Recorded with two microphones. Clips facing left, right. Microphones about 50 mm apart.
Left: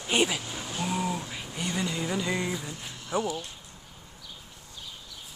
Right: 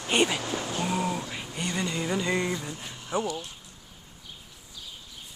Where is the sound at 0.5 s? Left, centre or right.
Right.